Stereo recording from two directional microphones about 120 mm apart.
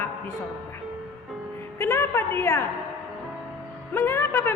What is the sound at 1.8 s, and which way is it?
Speech, 20° left (ahead or behind).